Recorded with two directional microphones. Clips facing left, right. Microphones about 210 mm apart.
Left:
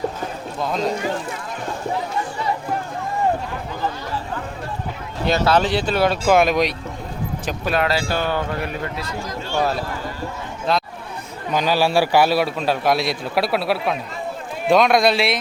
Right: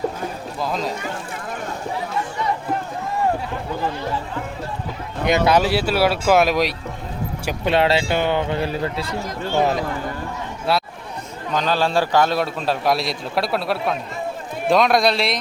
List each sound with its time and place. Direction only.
0.6 s a man's voice: centre (ahead or behind)
5.5 s speech: 10° right (ahead or behind)
7.6 s a man's voice: 25° right (ahead or behind)
9.5 s speech: 20° right (ahead or behind)
11.5 s a man's voice: 10° left (ahead or behind)